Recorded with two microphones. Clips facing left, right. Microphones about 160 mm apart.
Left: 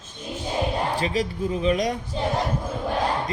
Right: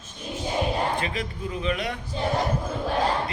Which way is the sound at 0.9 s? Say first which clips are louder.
Left 4 dB; 35° left (ahead or behind).